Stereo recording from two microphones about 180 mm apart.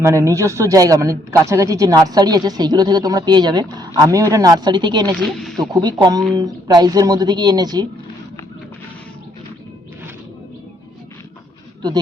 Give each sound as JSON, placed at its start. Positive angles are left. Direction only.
{"t": 0.0, "sound": "speech", "side_deg": -15}
{"t": 5.2, "sound": "speech", "side_deg": 0}
{"t": 5.7, "sound": "speech", "side_deg": -20}